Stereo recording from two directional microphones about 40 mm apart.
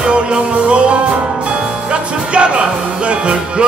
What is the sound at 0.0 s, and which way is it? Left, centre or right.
Music, right.